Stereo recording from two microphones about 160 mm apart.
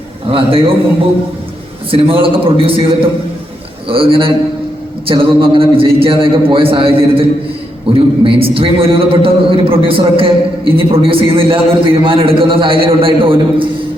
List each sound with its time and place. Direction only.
0.3 s a man's voice: 35° right (ahead or behind)
1.9 s a man's voice: 35° right (ahead or behind)